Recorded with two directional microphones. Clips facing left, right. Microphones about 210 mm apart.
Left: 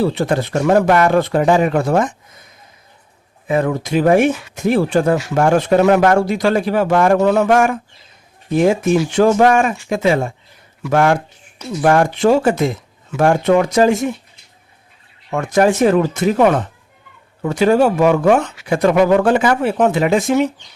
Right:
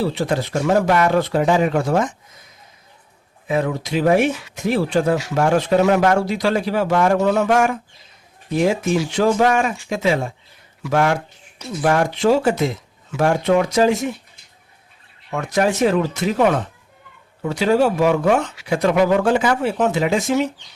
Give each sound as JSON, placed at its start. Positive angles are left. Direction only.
{"t": 0.0, "sound": "speech", "side_deg": 55}
{"t": 3.4, "sound": "speech", "side_deg": 50}
{"t": 15.3, "sound": "speech", "side_deg": 50}